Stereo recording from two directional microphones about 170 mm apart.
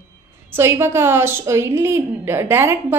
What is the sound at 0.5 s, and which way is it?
A woman's voice, 15° right (ahead or behind).